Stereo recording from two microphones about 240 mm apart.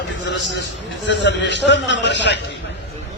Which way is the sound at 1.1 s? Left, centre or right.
Left.